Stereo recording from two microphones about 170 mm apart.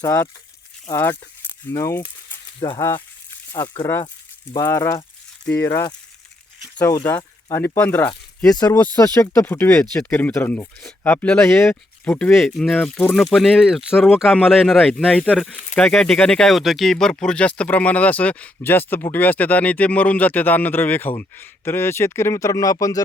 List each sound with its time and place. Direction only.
0.0 s speech: 15° left (ahead or behind)
2.6 s speech: 25° left (ahead or behind)
7.2 s a sound: 25° left (ahead or behind)
7.8 s speech: 10° left (ahead or behind)
8.5 s speech: 20° left (ahead or behind)
13.3 s speech: centre (ahead or behind); by 23.0 s 20° left (ahead or behind)